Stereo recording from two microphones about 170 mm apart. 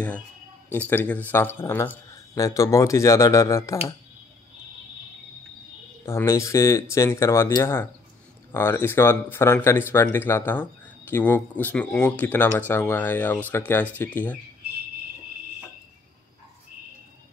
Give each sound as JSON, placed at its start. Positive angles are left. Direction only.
{"t": 0.7, "sound": "speech", "side_deg": 10}
{"t": 6.0, "sound": "speech", "side_deg": 15}